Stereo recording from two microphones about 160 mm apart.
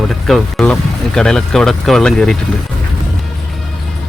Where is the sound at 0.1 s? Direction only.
Centre (ahead or behind).